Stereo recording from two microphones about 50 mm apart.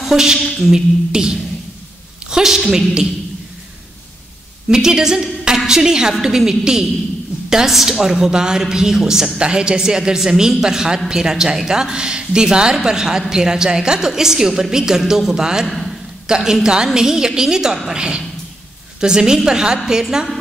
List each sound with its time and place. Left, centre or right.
0.0 s a woman's voice: centre
4.6 s a woman's voice: centre
15.7 s a sound: centre
16.3 s a woman's voice: centre